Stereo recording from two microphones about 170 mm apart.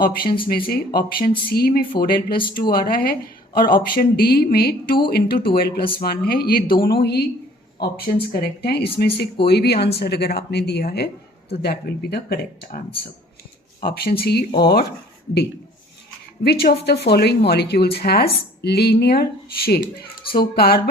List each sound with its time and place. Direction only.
0.0 s a woman's voice: 60° left (ahead or behind)
13.8 s speech: 65° left (ahead or behind)
16.4 s a woman's voice: 70° left (ahead or behind)